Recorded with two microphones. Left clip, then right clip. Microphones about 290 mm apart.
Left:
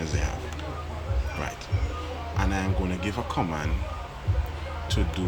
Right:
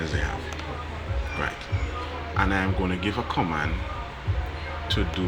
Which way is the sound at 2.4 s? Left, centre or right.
Centre.